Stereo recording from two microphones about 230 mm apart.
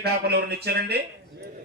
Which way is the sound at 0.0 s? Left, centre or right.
Right.